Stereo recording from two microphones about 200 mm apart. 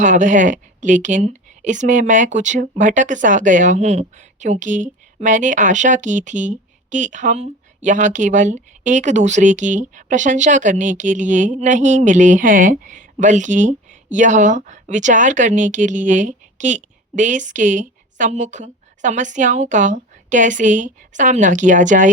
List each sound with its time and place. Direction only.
0.0 s speech: 40° right (ahead or behind)